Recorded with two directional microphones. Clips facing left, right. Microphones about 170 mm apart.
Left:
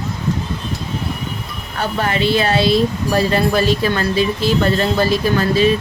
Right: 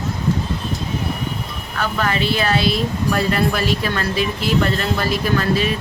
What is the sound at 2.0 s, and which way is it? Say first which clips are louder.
Speech: left 4 dB; 30° left (ahead or behind).